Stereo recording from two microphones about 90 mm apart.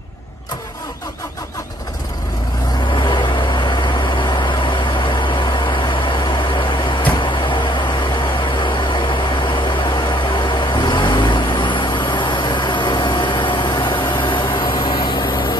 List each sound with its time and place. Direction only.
2.9 s vehicle: 60° left (ahead or behind)